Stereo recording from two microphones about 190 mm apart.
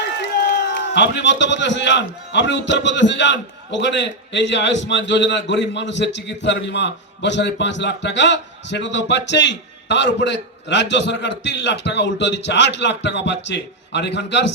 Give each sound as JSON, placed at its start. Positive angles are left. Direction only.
{"t": 0.0, "sound": "a man's voice", "side_deg": 55}